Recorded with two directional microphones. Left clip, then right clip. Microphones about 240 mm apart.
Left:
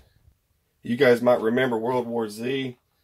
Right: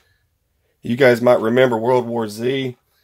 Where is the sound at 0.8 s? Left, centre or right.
Right.